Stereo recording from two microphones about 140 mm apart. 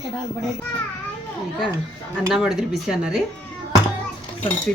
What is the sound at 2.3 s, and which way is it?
Speech, 5° right (ahead or behind).